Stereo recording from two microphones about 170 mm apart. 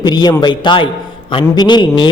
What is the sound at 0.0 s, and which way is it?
A man's voice, 25° left (ahead or behind).